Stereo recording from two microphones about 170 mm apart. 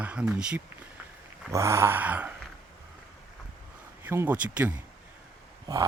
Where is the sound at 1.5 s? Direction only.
15° right (ahead or behind).